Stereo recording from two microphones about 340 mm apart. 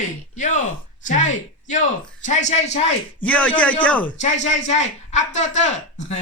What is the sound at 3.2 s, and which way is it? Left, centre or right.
Speech, centre.